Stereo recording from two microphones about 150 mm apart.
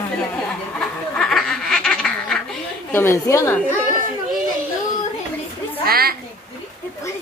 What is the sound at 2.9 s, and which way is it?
Speech, 15° left (ahead or behind).